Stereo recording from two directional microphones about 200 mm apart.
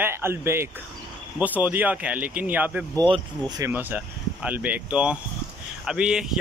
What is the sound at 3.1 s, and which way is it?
Speech, 20° right (ahead or behind).